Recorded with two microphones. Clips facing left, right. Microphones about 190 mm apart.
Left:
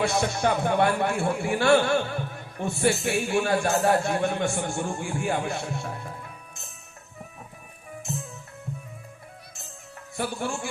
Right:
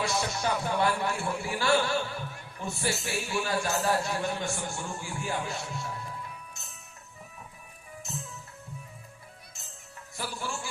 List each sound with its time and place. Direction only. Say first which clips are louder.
0.0 s a man's voice: left 6 dB; 55° left (ahead or behind)
10.2 s a man's voice: left 7 dB; 55° left (ahead or behind)